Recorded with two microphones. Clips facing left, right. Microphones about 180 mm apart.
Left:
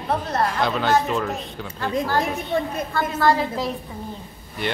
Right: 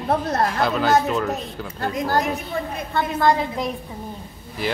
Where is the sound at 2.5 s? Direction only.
35° left (ahead or behind).